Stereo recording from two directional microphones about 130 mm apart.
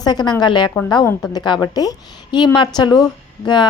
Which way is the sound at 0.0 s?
30° left (ahead or behind).